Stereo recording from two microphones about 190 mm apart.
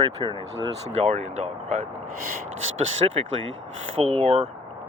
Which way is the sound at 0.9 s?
35° right (ahead or behind).